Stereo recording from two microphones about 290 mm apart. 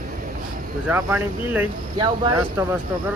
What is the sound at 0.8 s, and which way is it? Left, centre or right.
Speech, centre.